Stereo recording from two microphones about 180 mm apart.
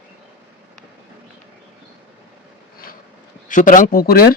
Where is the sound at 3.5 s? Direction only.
45° left (ahead or behind).